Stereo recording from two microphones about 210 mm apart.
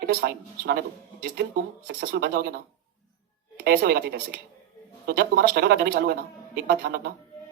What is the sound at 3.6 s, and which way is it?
Speech, 45° right (ahead or behind).